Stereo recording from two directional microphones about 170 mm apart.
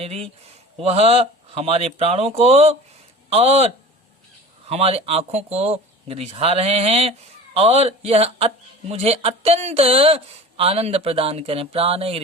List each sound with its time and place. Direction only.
0.0 s a man's voice: 35° right (ahead or behind)